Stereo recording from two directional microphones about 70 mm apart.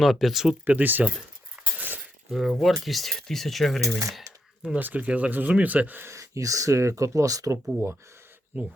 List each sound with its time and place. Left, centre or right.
0.0 s speech: centre
0.6 s speech: right
1.8 s cutlery: right
2.3 s speech: centre
4.8 s speech: right
6.1 s speech: right
8.5 s speech: right